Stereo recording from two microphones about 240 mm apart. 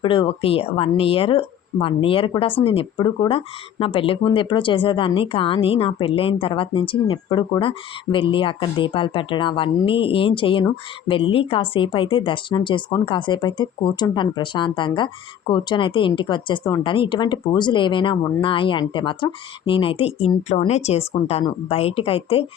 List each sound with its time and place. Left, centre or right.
0.0 s speech: left